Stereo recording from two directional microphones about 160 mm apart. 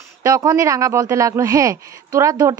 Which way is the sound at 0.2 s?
20° right (ahead or behind).